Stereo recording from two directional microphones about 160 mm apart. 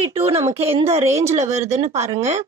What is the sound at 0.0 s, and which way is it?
Speech, 35° right (ahead or behind).